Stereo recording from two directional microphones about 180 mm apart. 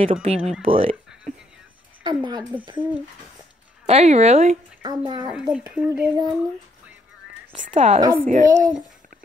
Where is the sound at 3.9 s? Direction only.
35° right (ahead or behind).